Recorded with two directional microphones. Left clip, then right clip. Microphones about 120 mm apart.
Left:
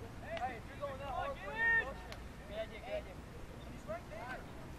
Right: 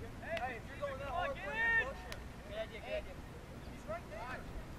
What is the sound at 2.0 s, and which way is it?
Vehicle, 15° right (ahead or behind).